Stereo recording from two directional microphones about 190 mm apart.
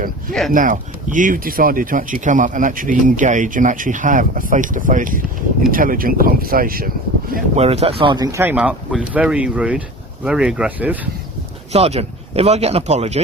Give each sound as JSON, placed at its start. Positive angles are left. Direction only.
{"t": 0.5, "sound": "speech", "side_deg": -45}
{"t": 7.5, "sound": "speech", "side_deg": -35}
{"t": 11.7, "sound": "speech", "side_deg": -30}